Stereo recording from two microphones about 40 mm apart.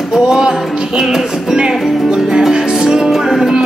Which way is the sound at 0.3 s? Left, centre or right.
Centre.